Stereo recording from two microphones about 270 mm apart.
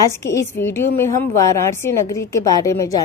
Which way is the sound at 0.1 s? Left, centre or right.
Centre.